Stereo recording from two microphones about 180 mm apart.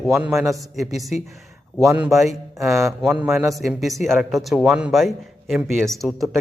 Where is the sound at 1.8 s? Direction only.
15° right (ahead or behind).